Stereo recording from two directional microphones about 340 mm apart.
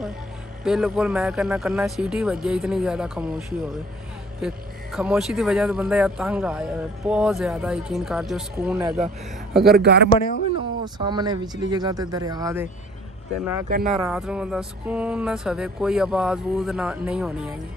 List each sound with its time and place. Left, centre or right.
0.7 s a man's voice: centre
9.8 s speech: right
10.0 s speech: left
10.8 s speech: centre
13.7 s speech: right
13.9 s speech: centre